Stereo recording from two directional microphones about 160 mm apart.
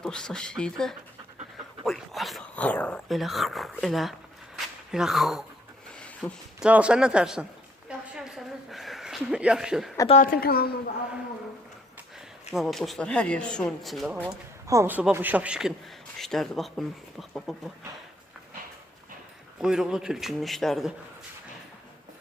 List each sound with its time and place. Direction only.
0.0 s speech: 5° left (ahead or behind)
4.5 s a sound: 5° right (ahead or behind)
6.6 s speech: 5° right (ahead or behind)
7.9 s a sound: 5° right (ahead or behind)
10.2 s a woman's voice: 65° left (ahead or behind)
12.5 s speech: centre (ahead or behind)
14.7 s speech: 15° right (ahead or behind); by 17.7 s centre (ahead or behind)
19.6 s speech: 5° right (ahead or behind)